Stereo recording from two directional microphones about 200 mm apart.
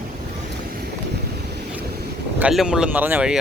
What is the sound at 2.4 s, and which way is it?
Speech, 5° right (ahead or behind).